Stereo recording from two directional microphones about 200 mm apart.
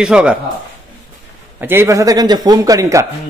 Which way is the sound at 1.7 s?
15° right (ahead or behind).